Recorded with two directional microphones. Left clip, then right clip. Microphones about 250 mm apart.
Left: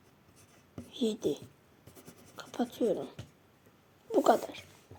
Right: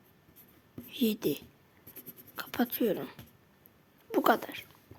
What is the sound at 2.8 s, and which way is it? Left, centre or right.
Speech, right.